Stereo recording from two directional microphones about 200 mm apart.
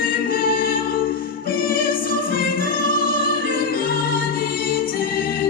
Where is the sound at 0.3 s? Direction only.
45° left (ahead or behind).